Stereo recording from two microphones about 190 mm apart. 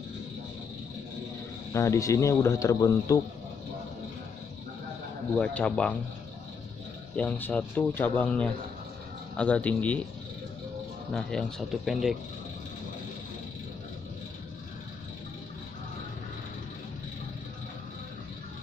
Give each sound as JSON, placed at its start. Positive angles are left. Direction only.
{"t": 1.7, "sound": "speech", "side_deg": 15}
{"t": 5.4, "sound": "speech", "side_deg": 5}
{"t": 7.2, "sound": "speech", "side_deg": 10}
{"t": 11.1, "sound": "speech", "side_deg": 5}